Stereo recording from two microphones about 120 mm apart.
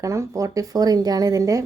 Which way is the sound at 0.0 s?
25° right (ahead or behind).